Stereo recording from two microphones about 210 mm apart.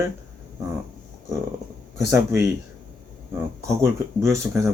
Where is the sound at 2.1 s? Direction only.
15° right (ahead or behind).